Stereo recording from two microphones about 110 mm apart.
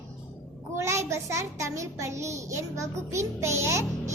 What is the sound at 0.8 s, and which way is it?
A child's voice, 25° right (ahead or behind).